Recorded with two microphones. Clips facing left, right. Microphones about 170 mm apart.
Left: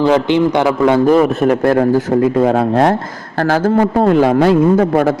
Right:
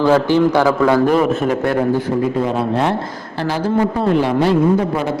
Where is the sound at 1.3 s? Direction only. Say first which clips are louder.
Left 4 dB; 40° left (ahead or behind).